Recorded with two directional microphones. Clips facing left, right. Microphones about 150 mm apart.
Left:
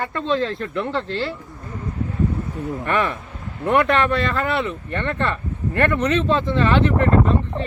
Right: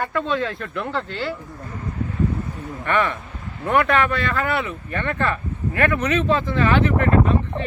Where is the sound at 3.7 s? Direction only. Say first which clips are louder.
Left 1 dB; centre (ahead or behind).